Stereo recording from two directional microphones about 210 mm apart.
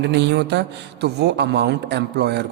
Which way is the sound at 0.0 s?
55° right (ahead or behind).